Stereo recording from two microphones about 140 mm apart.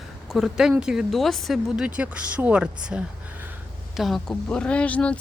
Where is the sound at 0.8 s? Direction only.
5° right (ahead or behind).